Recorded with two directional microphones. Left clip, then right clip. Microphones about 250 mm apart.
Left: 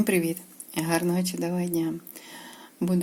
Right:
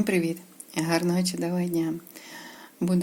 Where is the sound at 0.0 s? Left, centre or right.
Centre.